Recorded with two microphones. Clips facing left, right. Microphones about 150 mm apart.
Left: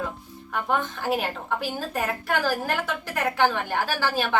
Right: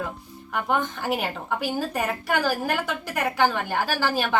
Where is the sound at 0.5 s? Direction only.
15° right (ahead or behind).